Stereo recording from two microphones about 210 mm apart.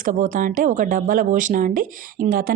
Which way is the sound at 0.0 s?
40° right (ahead or behind).